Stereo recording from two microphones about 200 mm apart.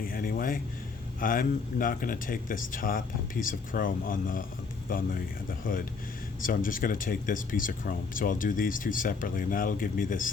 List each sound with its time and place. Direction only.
0.0 s speech: 45° left (ahead or behind)